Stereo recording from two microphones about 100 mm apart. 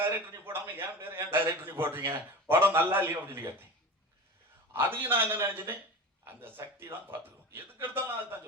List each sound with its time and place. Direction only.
0.0 s a man's voice: 25° right (ahead or behind)
4.7 s a man's voice: 20° right (ahead or behind)